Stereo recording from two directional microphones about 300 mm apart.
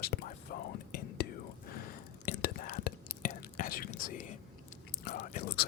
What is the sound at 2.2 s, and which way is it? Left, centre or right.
Whispering, left.